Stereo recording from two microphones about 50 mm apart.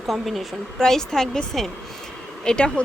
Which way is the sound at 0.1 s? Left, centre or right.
Centre.